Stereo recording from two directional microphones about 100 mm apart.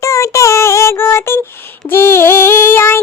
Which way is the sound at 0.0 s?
30° left (ahead or behind).